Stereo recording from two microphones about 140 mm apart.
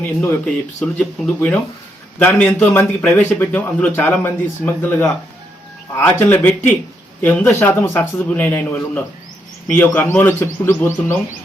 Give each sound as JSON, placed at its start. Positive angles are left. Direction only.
{"t": 0.0, "sound": "a man's voice", "side_deg": 15}